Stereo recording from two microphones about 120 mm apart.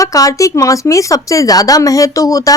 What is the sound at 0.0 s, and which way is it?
Speech, 30° left (ahead or behind).